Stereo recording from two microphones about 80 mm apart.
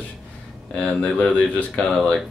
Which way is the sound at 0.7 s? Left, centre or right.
Centre.